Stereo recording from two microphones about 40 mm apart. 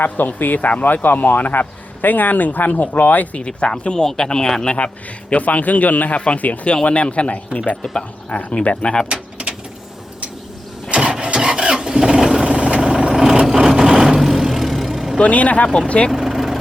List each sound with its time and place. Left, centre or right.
0.3 s a man's voice: left
1.0 s a man's voice: left
3.3 s speech: left
5.3 s speech: left
8.3 s speech: left
8.5 s speech: left
11.1 s rub: right
11.7 s vehicle: centre
12.5 s vehicle: right
14.2 s vehicle: centre
15.2 s speech: left
16.1 s vehicle: centre